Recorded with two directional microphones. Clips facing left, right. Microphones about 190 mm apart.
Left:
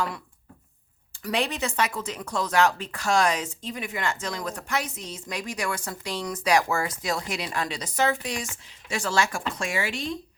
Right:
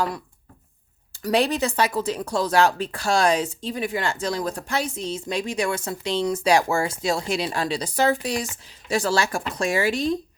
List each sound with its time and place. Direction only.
1.1 s speech: 35° right (ahead or behind)